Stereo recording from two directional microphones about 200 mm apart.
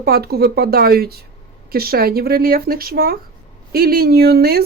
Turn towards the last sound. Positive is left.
turn(degrees=-50)  # may be behind; listen again after turning